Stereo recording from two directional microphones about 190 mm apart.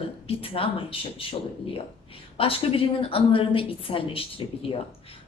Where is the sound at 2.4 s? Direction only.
30° left (ahead or behind).